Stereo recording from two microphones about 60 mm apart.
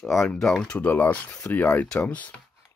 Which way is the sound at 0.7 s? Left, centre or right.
Left.